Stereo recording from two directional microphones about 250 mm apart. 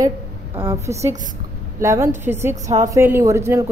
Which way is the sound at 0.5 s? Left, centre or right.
Centre.